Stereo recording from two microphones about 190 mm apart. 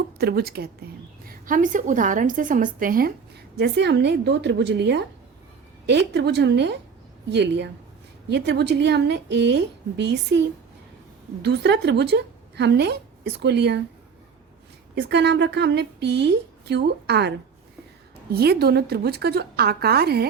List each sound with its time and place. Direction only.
0.2 s a woman's voice: 55° right (ahead or behind)
1.3 s a woman's voice: 45° right (ahead or behind); by 10.4 s 65° right (ahead or behind)
11.4 s a woman's voice: 60° right (ahead or behind)
15.1 s a woman's voice: 65° right (ahead or behind)
18.3 s a woman's voice: 55° right (ahead or behind)